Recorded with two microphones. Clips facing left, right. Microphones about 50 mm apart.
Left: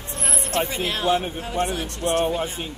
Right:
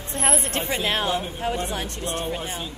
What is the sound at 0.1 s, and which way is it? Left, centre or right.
Speech, right.